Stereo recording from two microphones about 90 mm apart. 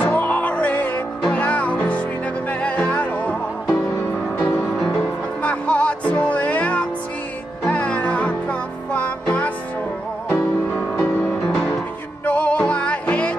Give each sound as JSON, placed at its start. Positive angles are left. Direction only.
{"t": 0.0, "sound": "music", "side_deg": 20}
{"t": 11.0, "sound": "music", "side_deg": 15}